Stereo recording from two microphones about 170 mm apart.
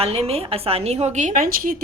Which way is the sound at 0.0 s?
35° right (ahead or behind).